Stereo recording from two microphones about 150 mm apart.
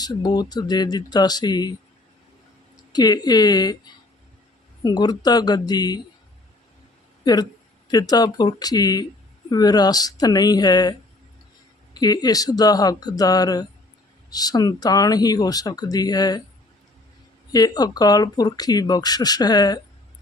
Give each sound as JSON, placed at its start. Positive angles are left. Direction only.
{"t": 0.0, "sound": "speech", "side_deg": 25}
{"t": 2.9, "sound": "speech", "side_deg": 25}
{"t": 4.8, "sound": "speech", "side_deg": 25}
{"t": 7.9, "sound": "speech", "side_deg": 25}
{"t": 11.9, "sound": "speech", "side_deg": 25}
{"t": 17.5, "sound": "speech", "side_deg": 25}